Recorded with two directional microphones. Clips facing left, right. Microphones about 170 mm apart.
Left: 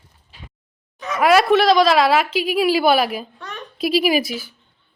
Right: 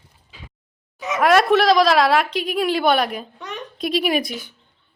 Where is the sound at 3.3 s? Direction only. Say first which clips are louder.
Right 2 dB; 20° right (ahead or behind).